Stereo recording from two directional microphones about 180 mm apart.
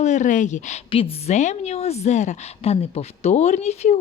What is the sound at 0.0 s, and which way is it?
A woman's voice, 40° left (ahead or behind).